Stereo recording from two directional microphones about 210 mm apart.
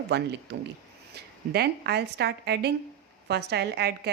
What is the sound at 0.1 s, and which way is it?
A woman's voice, 55° right (ahead or behind).